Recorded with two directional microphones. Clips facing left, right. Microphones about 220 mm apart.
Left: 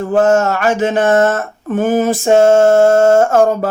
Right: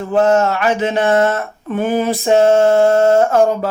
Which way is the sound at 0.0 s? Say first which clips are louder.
Left 2 dB; 50° left (ahead or behind).